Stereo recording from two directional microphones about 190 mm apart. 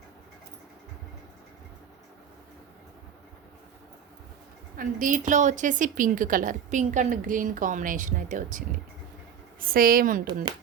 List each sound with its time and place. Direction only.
4.8 s a woman's voice: 45° right (ahead or behind)